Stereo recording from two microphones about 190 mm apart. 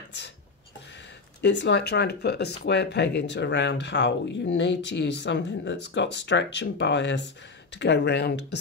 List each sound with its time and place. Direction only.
1.4 s speech: 70° left (ahead or behind)